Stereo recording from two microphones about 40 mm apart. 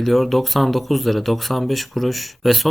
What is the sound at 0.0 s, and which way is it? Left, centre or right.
Speech, centre.